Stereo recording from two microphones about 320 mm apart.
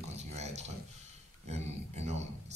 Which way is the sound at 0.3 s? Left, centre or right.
Right.